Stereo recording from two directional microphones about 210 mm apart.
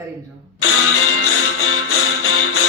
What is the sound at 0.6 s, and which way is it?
Music, 85° left.